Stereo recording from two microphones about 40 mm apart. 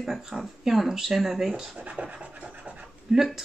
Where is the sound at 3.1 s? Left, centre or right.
Centre.